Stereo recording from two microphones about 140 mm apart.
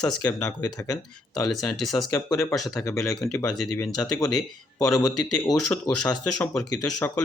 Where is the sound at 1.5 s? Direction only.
Centre (ahead or behind).